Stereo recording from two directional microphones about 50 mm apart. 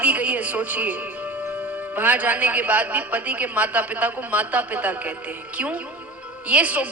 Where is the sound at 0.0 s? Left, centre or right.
Right.